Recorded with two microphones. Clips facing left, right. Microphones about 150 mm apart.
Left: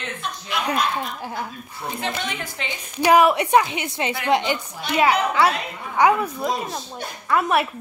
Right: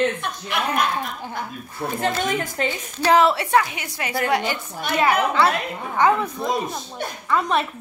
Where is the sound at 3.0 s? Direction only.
15° left (ahead or behind).